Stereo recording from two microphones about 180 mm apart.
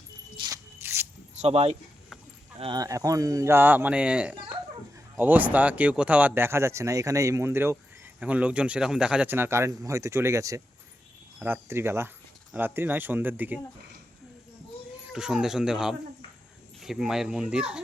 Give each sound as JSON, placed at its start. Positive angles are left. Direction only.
{"t": 0.4, "sound": "music", "side_deg": -15}
{"t": 1.4, "sound": "speech", "side_deg": -35}
{"t": 15.1, "sound": "speech", "side_deg": -5}